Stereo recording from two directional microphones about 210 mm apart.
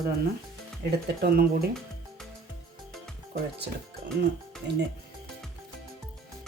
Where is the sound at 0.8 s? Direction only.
50° right (ahead or behind).